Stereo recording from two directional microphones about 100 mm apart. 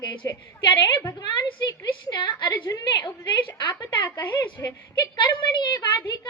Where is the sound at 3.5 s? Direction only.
55° left (ahead or behind).